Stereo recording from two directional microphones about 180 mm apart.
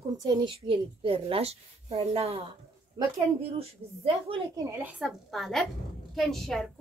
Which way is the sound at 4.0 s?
30° right (ahead or behind).